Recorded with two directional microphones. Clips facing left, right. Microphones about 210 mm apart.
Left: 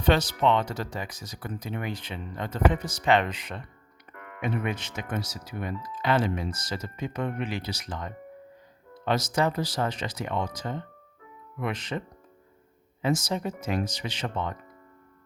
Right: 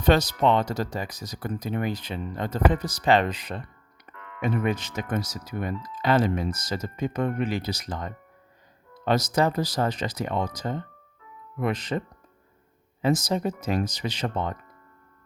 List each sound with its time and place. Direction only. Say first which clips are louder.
0.0 s speech: right 2 dB; 40° right (ahead or behind)